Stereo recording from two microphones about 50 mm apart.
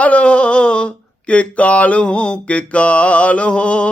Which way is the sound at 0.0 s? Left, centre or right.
Left.